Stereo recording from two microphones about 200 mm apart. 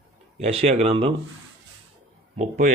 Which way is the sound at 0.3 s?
30° right (ahead or behind).